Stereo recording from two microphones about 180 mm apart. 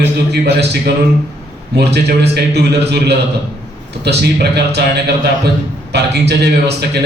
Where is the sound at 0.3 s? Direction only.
65° right (ahead or behind).